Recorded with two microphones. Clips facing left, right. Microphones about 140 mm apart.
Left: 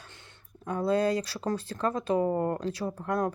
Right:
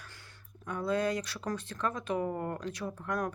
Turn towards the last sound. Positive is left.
turn(degrees=30)  # may be behind; listen again after turning